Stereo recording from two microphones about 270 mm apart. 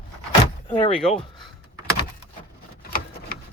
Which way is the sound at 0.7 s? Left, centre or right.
Centre.